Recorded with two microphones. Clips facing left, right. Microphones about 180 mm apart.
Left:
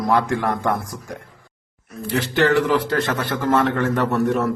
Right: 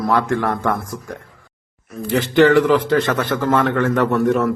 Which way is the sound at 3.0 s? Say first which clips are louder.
Right 4 dB; 55° right (ahead or behind).